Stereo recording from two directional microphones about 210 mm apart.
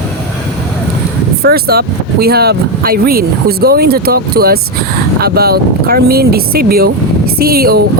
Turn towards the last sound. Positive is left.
turn(degrees=-45)  # may be behind; listen again after turning